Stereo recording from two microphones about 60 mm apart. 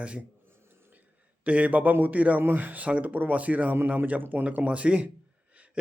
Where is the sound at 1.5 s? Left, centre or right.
Right.